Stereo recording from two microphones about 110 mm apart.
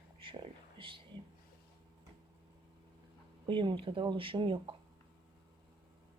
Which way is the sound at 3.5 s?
45° right (ahead or behind).